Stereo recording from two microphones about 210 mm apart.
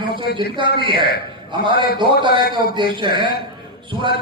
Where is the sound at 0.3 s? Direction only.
25° right (ahead or behind).